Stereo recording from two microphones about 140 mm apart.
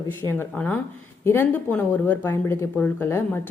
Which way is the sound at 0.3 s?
15° left (ahead or behind).